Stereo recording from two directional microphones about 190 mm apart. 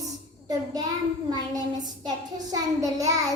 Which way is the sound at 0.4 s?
20° right (ahead or behind).